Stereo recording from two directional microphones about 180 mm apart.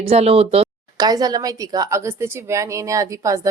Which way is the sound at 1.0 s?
20° right (ahead or behind).